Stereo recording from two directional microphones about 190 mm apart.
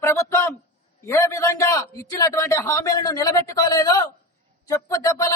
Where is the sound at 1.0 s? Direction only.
15° left (ahead or behind).